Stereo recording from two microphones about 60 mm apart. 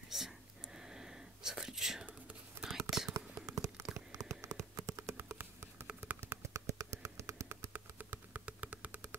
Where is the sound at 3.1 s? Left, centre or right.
Right.